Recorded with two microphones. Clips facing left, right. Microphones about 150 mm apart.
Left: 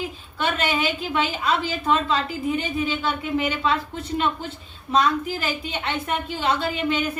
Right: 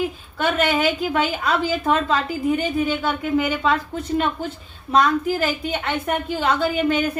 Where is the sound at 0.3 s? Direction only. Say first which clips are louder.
Right 4 dB; 50° right (ahead or behind).